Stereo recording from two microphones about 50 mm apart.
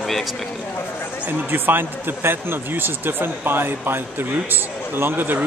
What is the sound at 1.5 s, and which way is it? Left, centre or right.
A man's voice, right.